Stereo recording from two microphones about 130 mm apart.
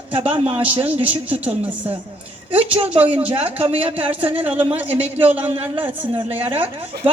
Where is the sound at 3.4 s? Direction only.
50° right (ahead or behind).